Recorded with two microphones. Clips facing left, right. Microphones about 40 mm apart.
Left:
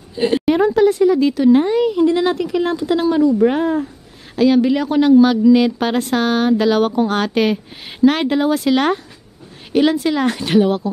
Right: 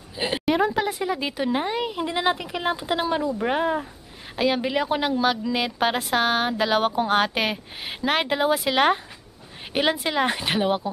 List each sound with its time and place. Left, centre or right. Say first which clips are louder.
0.1 s a woman's voice: left 8 dB; centre
0.8 s a woman's voice: left 13 dB; centre